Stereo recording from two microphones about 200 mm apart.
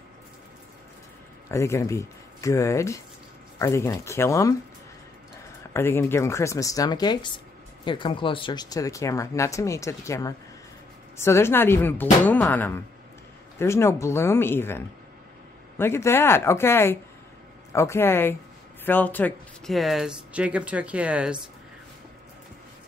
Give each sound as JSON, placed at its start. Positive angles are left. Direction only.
{"t": 1.5, "sound": "speech", "side_deg": 15}
{"t": 5.7, "sound": "speech", "side_deg": 10}
{"t": 15.8, "sound": "speech", "side_deg": 10}